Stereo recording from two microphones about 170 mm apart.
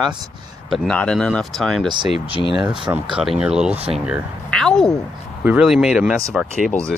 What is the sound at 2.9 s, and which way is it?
Speech, 5° right (ahead or behind).